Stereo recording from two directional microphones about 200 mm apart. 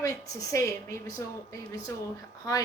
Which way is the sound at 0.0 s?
15° left (ahead or behind).